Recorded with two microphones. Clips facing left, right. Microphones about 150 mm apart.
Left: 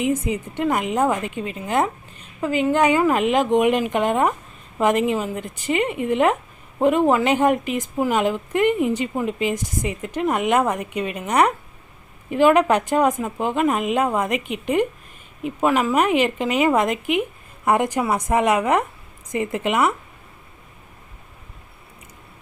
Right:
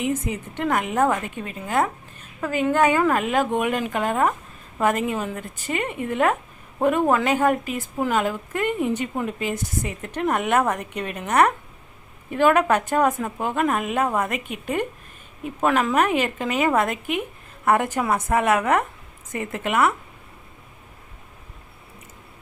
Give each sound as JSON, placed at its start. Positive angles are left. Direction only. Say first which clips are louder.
{"t": 0.1, "sound": "a woman's voice", "louder": "left 3 dB", "side_deg": 10}
{"t": 15.6, "sound": "a woman's voice", "louder": "left 1 dB", "side_deg": 5}